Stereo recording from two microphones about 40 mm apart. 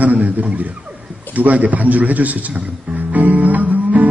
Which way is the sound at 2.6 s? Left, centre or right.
Right.